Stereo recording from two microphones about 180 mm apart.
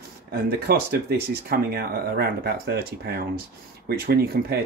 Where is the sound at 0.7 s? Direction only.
60° right (ahead or behind).